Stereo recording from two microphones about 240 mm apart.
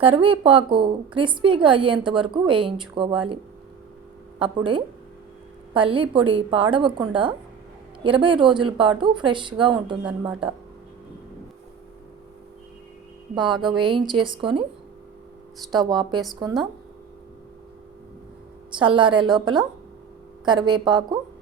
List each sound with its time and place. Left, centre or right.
0.0 s a woman's voice: right
4.4 s a woman's voice: centre
13.3 s a woman's voice: centre
15.8 s a woman's voice: centre
18.8 s a woman's voice: centre
20.4 s a woman's voice: centre